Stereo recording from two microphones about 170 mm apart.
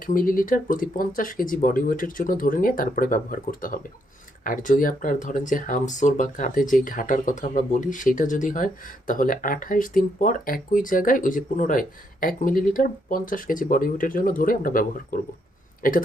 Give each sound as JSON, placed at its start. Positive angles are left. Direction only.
{"t": 0.0, "sound": "speech", "side_deg": 55}